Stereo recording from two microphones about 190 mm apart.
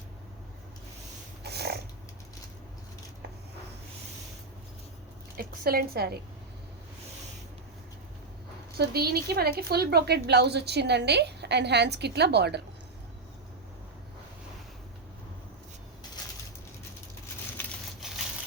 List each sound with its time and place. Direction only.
1.5 s a sound: 60° right (ahead or behind)
5.4 s a woman's voice: 50° right (ahead or behind)
8.9 s a woman's voice: 55° right (ahead or behind)